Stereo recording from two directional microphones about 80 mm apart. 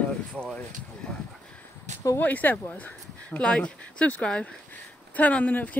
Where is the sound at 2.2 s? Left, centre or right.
Left.